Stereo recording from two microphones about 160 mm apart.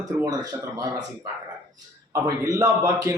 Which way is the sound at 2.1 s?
20° right (ahead or behind).